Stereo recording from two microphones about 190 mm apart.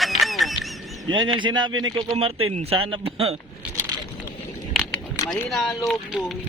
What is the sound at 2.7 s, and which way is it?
Speech, 30° right (ahead or behind).